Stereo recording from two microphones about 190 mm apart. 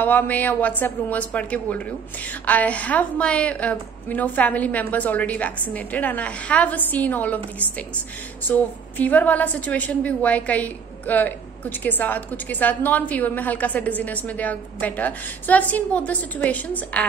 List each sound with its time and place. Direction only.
0.0 s a woman's voice: 10° left (ahead or behind)